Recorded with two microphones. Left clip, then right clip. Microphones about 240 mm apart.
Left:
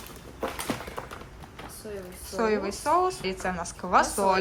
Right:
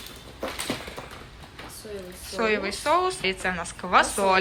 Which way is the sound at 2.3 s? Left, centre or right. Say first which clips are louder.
Right 2 dB; centre.